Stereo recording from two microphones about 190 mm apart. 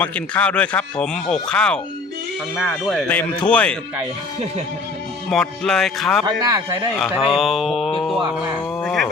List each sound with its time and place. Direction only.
0.0 s speech: 5° left (ahead or behind)
5.3 s speech: 5° left (ahead or behind)
6.2 s speech: 20° right (ahead or behind)
7.0 s speech: centre (ahead or behind)
8.8 s dog: centre (ahead or behind)